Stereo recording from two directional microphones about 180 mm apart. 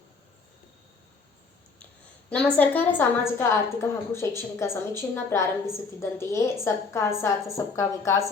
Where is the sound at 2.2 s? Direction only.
10° left (ahead or behind).